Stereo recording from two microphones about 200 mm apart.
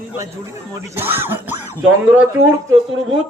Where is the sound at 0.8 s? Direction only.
10° right (ahead or behind).